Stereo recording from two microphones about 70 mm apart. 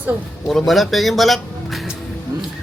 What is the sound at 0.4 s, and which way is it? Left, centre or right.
Speech, centre.